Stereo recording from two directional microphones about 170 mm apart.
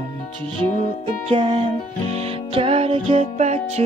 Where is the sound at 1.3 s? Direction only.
40° right (ahead or behind).